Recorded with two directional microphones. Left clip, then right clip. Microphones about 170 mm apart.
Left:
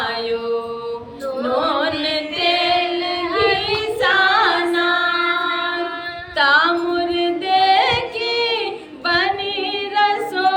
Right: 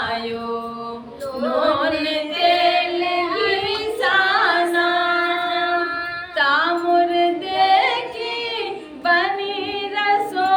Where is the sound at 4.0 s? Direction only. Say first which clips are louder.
Left 2 dB; 15° left (ahead or behind).